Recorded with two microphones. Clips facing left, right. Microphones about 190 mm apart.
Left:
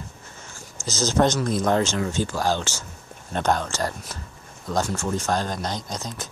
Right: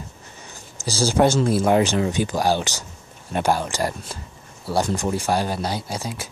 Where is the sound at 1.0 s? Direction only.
10° right (ahead or behind).